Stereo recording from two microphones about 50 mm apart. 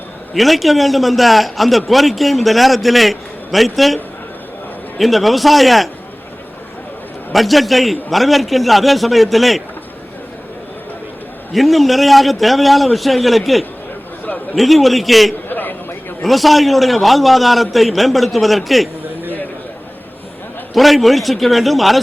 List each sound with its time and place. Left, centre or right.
0.3 s a man's voice: centre
7.3 s a man's voice: centre
11.5 s a man's voice: centre
15.4 s a sound: left
16.2 s a man's voice: centre
20.7 s a man's voice: centre